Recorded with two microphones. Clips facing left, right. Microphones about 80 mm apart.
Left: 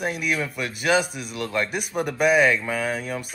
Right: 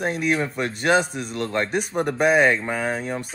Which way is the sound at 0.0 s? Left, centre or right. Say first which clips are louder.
Right 3 dB; right.